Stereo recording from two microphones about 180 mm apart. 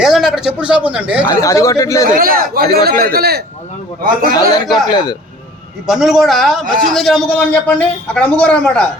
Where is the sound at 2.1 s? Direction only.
55° right (ahead or behind).